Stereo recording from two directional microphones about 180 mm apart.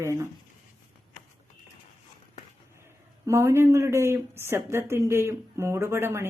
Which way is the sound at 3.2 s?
15° right (ahead or behind).